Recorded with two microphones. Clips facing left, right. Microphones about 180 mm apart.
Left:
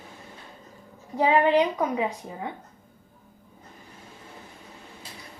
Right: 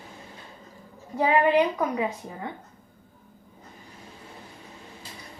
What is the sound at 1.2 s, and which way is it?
Speech, 20° left (ahead or behind).